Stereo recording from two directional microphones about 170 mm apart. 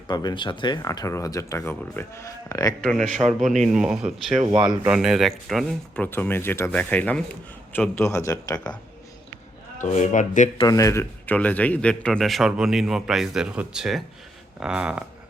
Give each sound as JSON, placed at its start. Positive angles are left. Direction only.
{"t": 0.1, "sound": "speech", "side_deg": 25}
{"t": 3.2, "sound": "speech", "side_deg": 0}
{"t": 4.5, "sound": "speech", "side_deg": -25}
{"t": 4.8, "sound": "speech", "side_deg": -5}
{"t": 6.1, "sound": "speech", "side_deg": 10}
{"t": 9.7, "sound": "speech", "side_deg": 45}
{"t": 10.6, "sound": "speech", "side_deg": 20}
{"t": 14.6, "sound": "a sound", "side_deg": -5}